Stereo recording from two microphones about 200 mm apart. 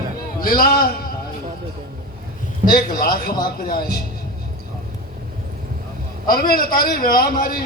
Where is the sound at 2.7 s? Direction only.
45° left (ahead or behind).